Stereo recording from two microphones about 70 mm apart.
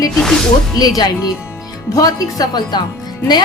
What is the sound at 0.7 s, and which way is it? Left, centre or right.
A woman's voice, left.